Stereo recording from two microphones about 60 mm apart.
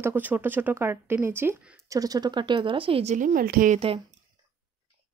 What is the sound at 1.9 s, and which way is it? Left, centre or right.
Speech, right.